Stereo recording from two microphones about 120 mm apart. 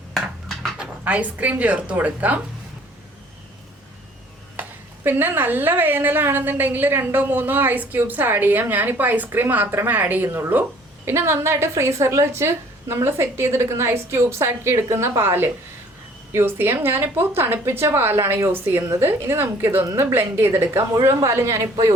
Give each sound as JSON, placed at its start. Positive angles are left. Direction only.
{"t": 0.6, "sound": "speech", "side_deg": -10}
{"t": 5.0, "sound": "a woman's voice", "side_deg": -20}